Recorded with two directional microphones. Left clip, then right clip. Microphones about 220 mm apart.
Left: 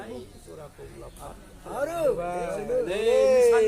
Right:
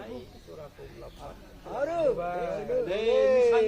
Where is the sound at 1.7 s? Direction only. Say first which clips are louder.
Left 1 dB; 35° left (ahead or behind).